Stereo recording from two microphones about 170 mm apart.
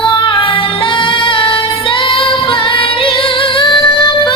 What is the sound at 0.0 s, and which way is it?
Music, 30° left (ahead or behind).